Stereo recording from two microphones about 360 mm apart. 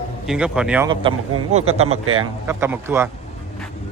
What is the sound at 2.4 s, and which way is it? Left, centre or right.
Speech, centre.